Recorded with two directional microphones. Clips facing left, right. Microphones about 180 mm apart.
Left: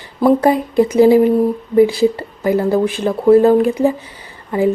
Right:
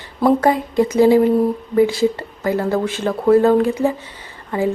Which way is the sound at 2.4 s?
15° left (ahead or behind).